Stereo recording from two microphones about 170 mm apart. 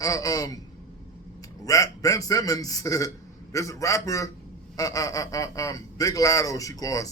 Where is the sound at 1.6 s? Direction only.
20° left (ahead or behind).